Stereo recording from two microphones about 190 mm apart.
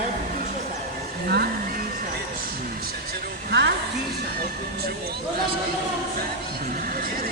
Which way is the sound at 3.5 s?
60° right (ahead or behind).